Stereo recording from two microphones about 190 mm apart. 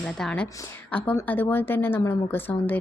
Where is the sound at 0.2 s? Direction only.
5° left (ahead or behind).